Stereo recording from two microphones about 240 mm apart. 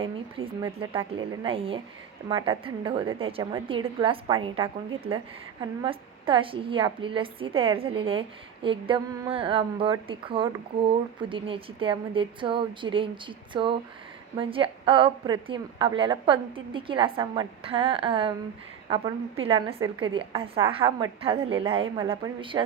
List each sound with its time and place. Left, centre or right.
0.3 s a woman's voice: right